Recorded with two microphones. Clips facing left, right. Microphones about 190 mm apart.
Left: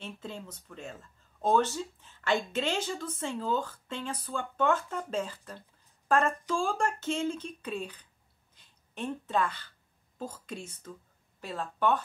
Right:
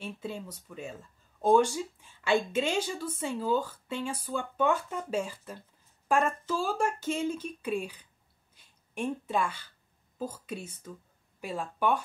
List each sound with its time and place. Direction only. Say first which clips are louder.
0.0 s a woman's voice: right 3 dB; 10° right (ahead or behind)
8.5 s a sound: right 3 dB; 10° right (ahead or behind)
10.1 s a woman's voice: right 3 dB; 10° right (ahead or behind)